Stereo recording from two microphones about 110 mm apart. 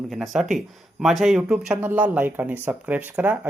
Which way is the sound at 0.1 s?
Centre (ahead or behind).